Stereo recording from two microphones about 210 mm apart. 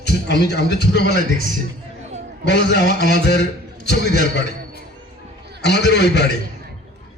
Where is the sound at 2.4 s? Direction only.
55° left (ahead or behind).